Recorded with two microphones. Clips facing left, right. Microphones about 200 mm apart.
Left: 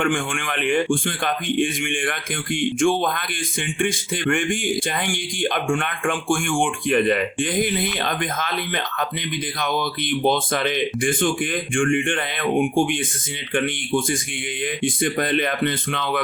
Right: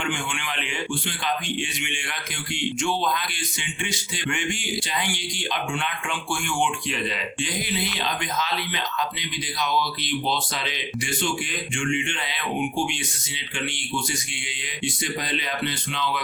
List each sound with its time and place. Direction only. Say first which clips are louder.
0.0 s speech: left 7 dB; 50° left (ahead or behind)